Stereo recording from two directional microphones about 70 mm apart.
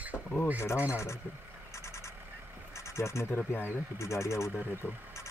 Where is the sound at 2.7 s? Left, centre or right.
Left.